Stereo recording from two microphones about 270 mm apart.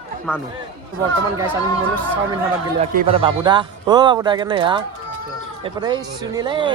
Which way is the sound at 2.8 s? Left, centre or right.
Right.